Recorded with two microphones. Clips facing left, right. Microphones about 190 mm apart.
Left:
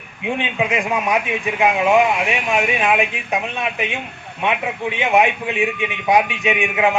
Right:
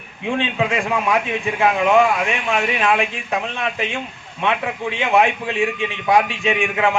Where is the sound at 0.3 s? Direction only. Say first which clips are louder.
Right 1 dB; 15° left (ahead or behind).